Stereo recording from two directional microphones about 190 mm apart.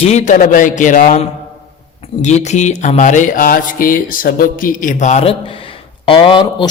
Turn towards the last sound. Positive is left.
turn(degrees=25)  # may be behind; listen again after turning